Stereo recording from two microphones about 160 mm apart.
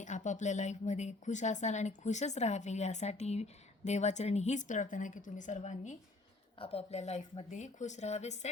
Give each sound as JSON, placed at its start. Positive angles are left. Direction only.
{"t": 0.0, "sound": "a woman's voice", "side_deg": 50}